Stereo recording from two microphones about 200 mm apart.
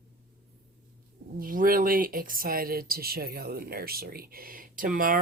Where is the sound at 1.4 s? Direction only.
45° right (ahead or behind).